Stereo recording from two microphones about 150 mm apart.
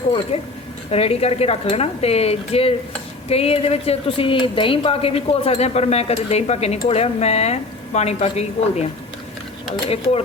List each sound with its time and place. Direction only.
0.3 s speech: 40° left (ahead or behind)